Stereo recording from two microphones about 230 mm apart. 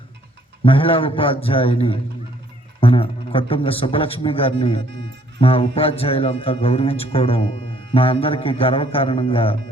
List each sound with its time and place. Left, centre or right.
0.6 s a man's voice: left